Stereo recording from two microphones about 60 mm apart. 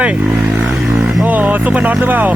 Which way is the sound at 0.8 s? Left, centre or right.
Centre.